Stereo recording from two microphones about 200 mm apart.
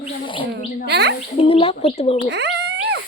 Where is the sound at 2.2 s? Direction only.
60° right (ahead or behind).